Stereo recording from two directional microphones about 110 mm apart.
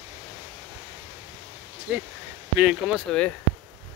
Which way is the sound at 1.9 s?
10° right (ahead or behind).